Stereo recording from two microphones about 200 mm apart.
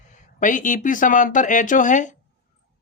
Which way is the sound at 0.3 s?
40° left (ahead or behind).